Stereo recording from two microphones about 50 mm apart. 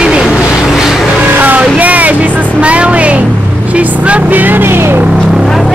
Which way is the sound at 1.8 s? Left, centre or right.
Right.